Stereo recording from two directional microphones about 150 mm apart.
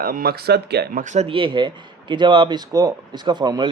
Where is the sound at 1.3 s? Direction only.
35° right (ahead or behind).